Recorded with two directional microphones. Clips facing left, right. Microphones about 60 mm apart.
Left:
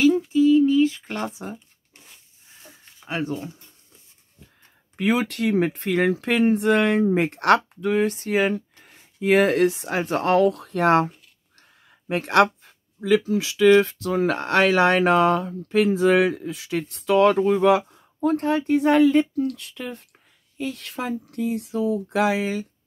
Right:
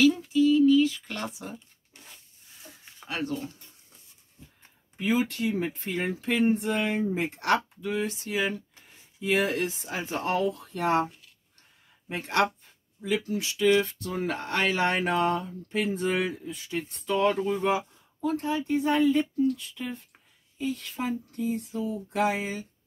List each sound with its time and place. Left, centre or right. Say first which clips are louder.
0.0 s a sound: left 4 dB; left
3.1 s speech: left 4 dB; left
4.9 s speech: left 4 dB; left
12.1 s speech: left 8 dB; left
13.7 s speech: left 8 dB; left